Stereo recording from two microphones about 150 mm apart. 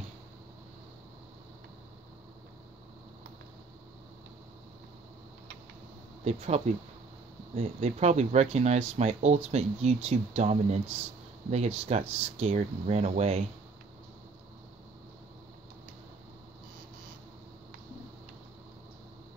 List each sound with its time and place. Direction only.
6.2 s speech: 45° right (ahead or behind)